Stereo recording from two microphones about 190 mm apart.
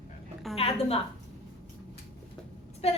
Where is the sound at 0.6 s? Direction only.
30° left (ahead or behind).